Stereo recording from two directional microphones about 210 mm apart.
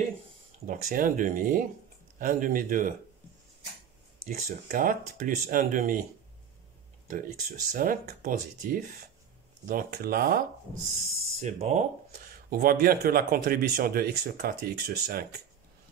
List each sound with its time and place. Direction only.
0.7 s speech: 40° right (ahead or behind)
4.4 s speech: 40° right (ahead or behind)
7.1 s speech: 40° right (ahead or behind)
11.4 s speech: 35° right (ahead or behind)